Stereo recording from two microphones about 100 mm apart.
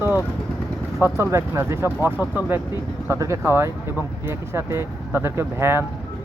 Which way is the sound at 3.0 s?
30° right (ahead or behind).